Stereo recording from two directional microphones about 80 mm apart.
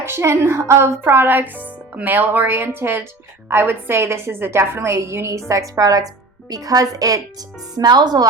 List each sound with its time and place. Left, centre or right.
0.0 s a woman's voice: right